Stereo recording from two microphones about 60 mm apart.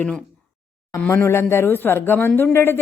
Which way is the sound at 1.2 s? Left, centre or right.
Left.